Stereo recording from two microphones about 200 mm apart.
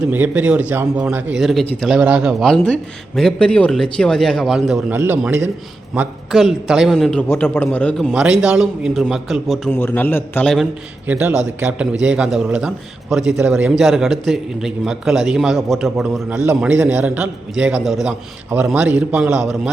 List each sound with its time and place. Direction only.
0.0 s a man's voice: 10° right (ahead or behind)
11.0 s a man's voice: 10° right (ahead or behind)